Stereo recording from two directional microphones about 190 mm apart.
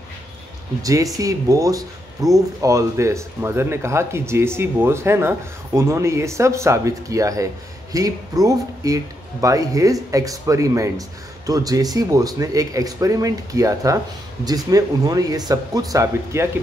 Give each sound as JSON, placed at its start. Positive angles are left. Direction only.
{"t": 0.8, "sound": "speech", "side_deg": -20}